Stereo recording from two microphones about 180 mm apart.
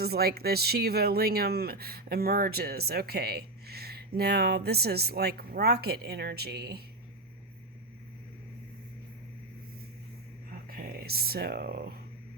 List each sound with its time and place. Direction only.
0.0 s speech: 60° right (ahead or behind)
10.7 s speech: 55° right (ahead or behind)